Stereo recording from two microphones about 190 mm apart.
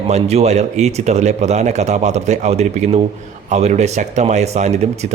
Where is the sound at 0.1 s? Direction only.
35° right (ahead or behind).